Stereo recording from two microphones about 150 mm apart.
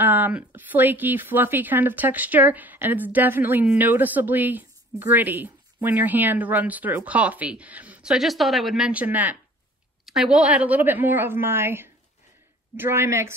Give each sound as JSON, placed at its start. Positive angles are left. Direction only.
{"t": 0.0, "sound": "speech", "side_deg": -10}